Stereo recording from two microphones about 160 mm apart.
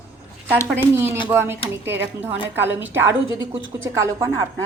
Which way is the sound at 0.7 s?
15° right (ahead or behind).